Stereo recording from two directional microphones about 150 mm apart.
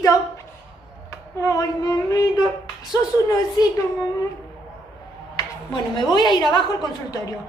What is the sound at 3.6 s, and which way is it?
Speech, 30° left (ahead or behind).